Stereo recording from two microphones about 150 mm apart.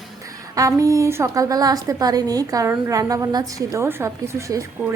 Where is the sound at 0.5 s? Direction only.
20° right (ahead or behind).